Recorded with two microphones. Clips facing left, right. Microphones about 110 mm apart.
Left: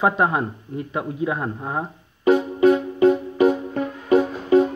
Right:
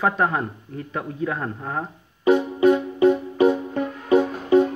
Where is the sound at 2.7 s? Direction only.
30° left (ahead or behind).